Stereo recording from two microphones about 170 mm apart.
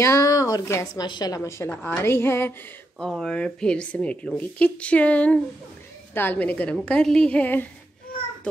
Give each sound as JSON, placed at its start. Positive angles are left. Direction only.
{"t": 0.0, "sound": "a woman's voice", "side_deg": 20}
{"t": 1.7, "sound": "speech", "side_deg": 10}
{"t": 3.0, "sound": "speech", "side_deg": 5}